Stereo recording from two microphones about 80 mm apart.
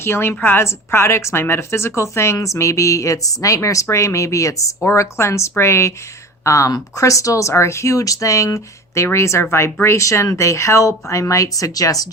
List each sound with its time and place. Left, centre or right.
0.0 s a woman's voice: left